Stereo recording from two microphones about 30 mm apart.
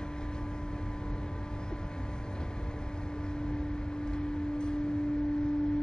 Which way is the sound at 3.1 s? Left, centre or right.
Left.